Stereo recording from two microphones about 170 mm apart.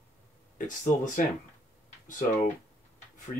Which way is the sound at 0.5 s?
50° left (ahead or behind).